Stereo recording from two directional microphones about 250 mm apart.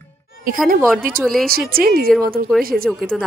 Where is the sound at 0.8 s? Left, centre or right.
Centre.